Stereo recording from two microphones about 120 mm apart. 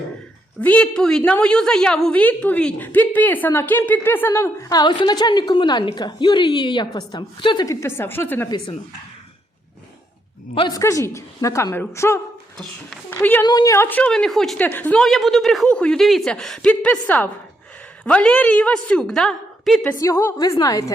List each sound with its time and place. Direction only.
0.6 s a woman's voice: 10° left (ahead or behind)
4.7 s a woman's voice: 35° left (ahead or behind); by 8.4 s 20° left (ahead or behind)
8.4 s a woman's voice: 35° left (ahead or behind)
10.7 s a woman's voice: 25° left (ahead or behind)
13.4 s a woman's voice: 35° left (ahead or behind)
13.7 s a woman's voice: 15° left (ahead or behind)
15.0 s a woman's voice: centre (ahead or behind)
19.9 s a woman's voice: 25° left (ahead or behind)